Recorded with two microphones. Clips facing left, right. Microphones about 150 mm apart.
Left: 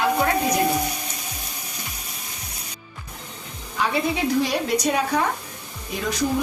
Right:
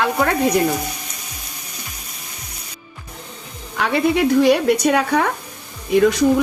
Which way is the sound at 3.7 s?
65° right (ahead or behind).